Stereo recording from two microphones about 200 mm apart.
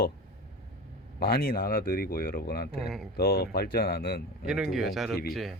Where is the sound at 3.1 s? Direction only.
50° left (ahead or behind).